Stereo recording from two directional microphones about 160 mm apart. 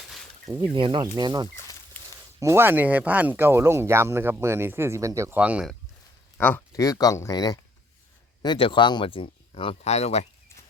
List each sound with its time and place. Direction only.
0.7 s speech: 30° right (ahead or behind)
2.4 s speech: 15° right (ahead or behind)
6.3 s speech: 10° left (ahead or behind)
6.7 s speech: 20° left (ahead or behind); by 10.2 s 45° left (ahead or behind)